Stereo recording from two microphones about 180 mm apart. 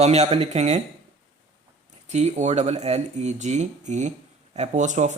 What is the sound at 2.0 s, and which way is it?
Speech, 40° right (ahead or behind).